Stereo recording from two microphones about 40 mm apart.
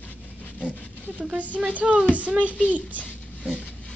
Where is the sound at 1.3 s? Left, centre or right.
Right.